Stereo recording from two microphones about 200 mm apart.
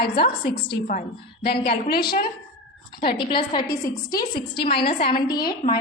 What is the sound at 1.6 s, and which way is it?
Speech, 55° left (ahead or behind).